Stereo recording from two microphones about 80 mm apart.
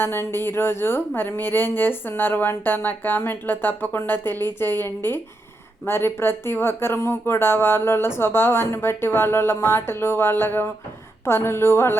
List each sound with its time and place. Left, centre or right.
0.0 s speech: left